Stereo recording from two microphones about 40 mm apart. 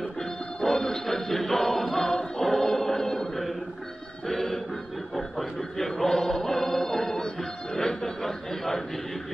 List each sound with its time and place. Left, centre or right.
0.2 s music: centre
2.6 s chant: centre
4.3 s music: centre
7.2 s chuckle: left